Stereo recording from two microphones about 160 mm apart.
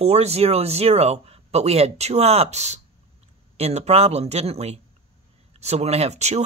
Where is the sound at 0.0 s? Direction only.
40° right (ahead or behind).